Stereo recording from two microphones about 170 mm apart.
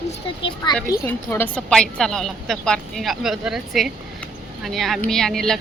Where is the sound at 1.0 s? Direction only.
10° left (ahead or behind).